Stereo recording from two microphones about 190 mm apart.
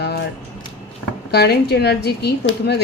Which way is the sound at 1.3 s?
60° left (ahead or behind).